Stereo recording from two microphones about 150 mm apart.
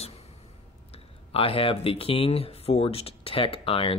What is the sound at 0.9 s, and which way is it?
Speech, 40° left (ahead or behind).